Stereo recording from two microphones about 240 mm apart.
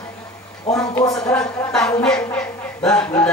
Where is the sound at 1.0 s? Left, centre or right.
Centre.